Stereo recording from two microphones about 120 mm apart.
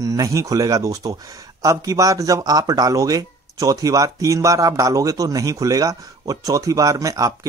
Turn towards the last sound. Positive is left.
turn(degrees=-30)  # may be behind; listen again after turning